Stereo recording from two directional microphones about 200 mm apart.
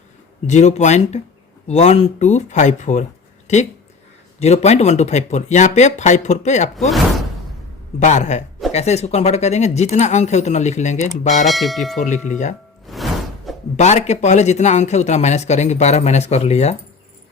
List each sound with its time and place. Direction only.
0.4 s speech: 35° left (ahead or behind)
7.9 s speech: 35° left (ahead or behind)
11.4 s speech: centre (ahead or behind)
11.9 s speech: 35° left (ahead or behind)
12.9 s music: centre (ahead or behind)
13.7 s speech: 35° left (ahead or behind)